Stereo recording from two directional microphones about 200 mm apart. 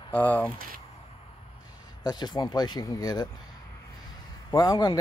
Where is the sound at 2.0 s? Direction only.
20° left (ahead or behind).